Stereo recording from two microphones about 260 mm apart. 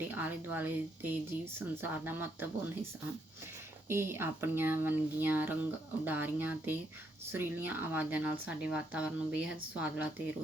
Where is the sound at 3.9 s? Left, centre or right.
Centre.